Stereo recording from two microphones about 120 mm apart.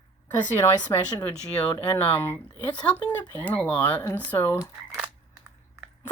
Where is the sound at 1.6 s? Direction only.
15° left (ahead or behind).